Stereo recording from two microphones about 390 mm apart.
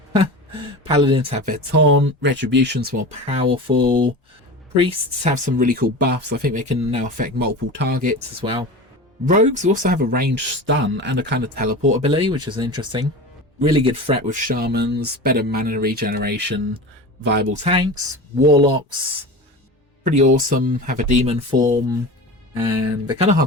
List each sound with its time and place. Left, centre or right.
0.9 s speech: centre
1.7 s speech: right; by 18.8 s centre
20.1 s speech: centre